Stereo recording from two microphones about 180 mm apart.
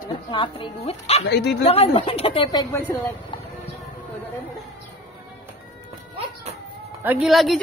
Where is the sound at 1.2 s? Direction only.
70° left (ahead or behind).